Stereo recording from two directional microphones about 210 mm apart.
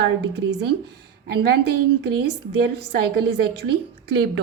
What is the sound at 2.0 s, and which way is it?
A woman's voice, 50° right (ahead or behind).